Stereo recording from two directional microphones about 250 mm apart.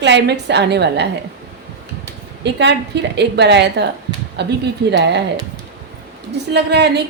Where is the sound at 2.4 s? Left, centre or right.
Right.